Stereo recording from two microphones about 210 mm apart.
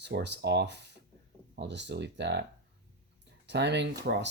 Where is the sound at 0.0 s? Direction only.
55° right (ahead or behind).